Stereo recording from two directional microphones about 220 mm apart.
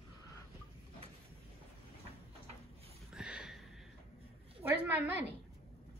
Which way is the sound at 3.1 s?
5° right (ahead or behind).